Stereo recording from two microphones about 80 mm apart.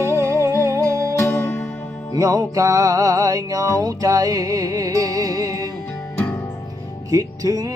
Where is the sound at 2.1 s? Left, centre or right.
Right.